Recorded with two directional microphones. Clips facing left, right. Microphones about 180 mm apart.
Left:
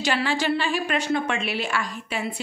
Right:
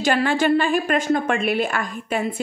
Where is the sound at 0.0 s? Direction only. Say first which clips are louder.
Right 5 dB; 50° right (ahead or behind).